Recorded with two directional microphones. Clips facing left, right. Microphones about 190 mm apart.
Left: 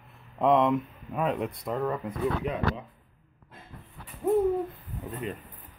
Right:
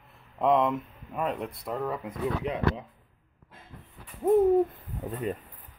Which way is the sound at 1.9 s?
20° right (ahead or behind).